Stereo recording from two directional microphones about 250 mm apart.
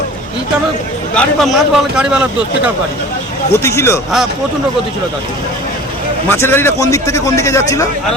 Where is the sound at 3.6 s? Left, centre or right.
Centre.